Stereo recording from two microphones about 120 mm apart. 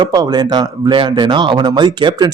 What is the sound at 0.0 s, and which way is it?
Speech, 35° right (ahead or behind).